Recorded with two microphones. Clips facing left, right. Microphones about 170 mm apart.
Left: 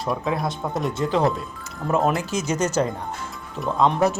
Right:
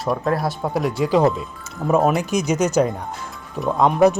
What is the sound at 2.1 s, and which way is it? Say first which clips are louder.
Speech: right 4 dB; 15° right (ahead or behind).